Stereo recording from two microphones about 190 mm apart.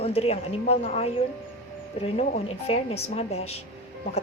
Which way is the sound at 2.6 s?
30° left (ahead or behind).